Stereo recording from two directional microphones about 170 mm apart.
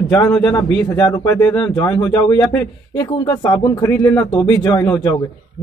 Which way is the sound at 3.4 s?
25° left (ahead or behind).